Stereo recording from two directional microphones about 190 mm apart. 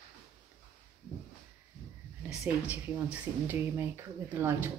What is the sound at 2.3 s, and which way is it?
Speech, 5° right (ahead or behind).